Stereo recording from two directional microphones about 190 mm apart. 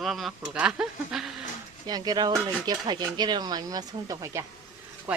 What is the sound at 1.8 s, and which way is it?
Speech, 20° right (ahead or behind).